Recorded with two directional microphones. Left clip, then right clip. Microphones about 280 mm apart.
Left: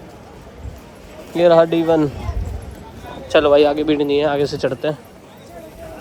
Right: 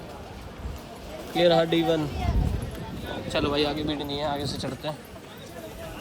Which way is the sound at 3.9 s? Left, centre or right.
Left.